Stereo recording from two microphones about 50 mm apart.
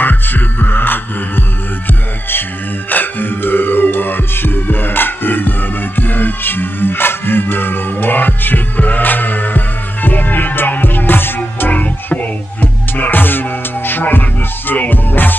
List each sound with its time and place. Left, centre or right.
0.0 s music: left
2.9 s music: left
11.7 s music: left